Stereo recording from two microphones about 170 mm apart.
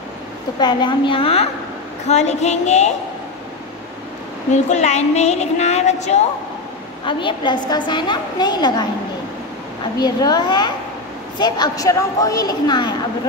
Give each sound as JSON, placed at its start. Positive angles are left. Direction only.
{"t": 0.6, "sound": "a woman's voice", "side_deg": 25}
{"t": 4.6, "sound": "a woman's voice", "side_deg": 40}
{"t": 7.1, "sound": "a woman's voice", "side_deg": 30}
{"t": 9.9, "sound": "a woman's voice", "side_deg": 25}